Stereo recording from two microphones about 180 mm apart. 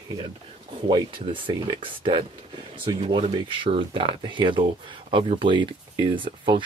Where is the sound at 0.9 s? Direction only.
25° right (ahead or behind).